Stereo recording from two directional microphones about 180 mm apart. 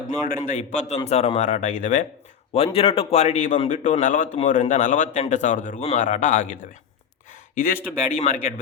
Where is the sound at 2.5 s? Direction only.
35° left (ahead or behind).